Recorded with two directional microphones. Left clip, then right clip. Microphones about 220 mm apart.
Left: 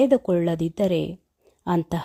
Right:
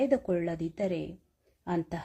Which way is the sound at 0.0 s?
35° left (ahead or behind).